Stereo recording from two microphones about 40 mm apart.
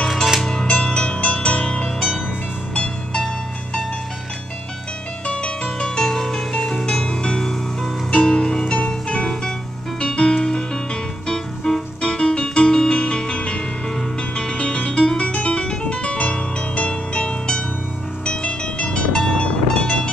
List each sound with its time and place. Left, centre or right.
0.4 s music: centre
0.7 s music: left
5.2 s music: left